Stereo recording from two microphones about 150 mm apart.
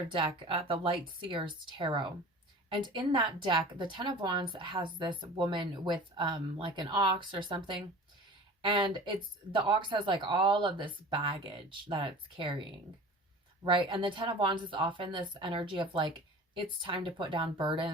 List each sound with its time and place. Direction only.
0.3 s speech: 35° right (ahead or behind)
13.7 s speech: 35° right (ahead or behind)